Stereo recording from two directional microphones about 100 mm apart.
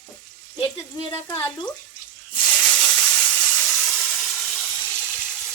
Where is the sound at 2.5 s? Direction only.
5° left (ahead or behind).